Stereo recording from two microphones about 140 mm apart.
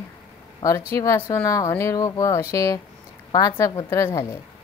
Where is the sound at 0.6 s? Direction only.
25° left (ahead or behind).